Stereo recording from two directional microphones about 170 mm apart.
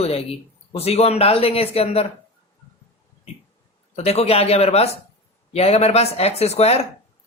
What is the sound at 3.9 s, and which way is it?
Speech, 40° left (ahead or behind).